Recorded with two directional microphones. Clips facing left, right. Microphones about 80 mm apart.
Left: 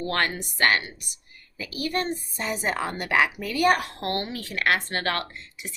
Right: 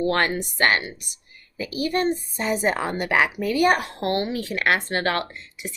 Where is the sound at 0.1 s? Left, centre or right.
Right.